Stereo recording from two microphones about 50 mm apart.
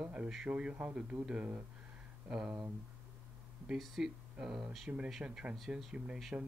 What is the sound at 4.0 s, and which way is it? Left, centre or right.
Speech, centre.